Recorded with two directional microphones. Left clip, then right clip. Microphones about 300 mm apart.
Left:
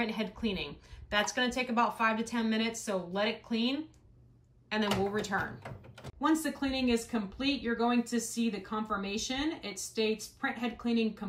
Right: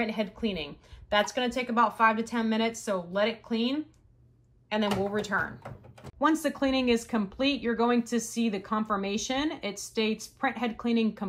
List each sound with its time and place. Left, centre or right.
0.0 s a woman's voice: centre
6.2 s speech: centre